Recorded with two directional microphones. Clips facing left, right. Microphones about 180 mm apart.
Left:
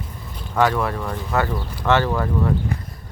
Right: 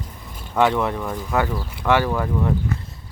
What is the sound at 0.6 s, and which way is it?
Speech, 20° right (ahead or behind).